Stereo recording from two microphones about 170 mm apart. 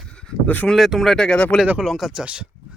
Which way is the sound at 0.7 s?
Centre (ahead or behind).